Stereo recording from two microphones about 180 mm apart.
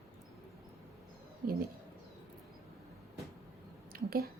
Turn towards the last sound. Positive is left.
turn(degrees=-55)  # may be behind; listen again after turning